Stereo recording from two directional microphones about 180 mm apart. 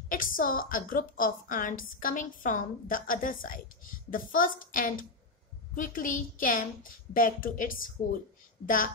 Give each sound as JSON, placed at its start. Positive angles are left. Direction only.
{"t": 0.1, "sound": "a woman's voice", "side_deg": 50}